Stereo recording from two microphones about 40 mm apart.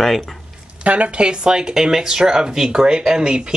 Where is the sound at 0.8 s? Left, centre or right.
Right.